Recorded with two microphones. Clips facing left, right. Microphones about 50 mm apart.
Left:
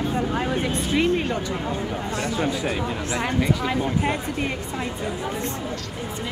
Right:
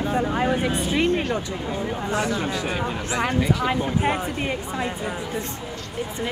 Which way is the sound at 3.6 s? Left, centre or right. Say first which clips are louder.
Right 1 dB; centre.